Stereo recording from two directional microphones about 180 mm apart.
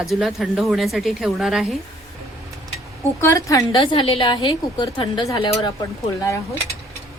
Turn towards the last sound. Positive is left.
turn(degrees=15)  # may be behind; listen again after turning